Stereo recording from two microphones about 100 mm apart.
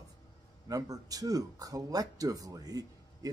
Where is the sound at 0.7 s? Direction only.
35° right (ahead or behind).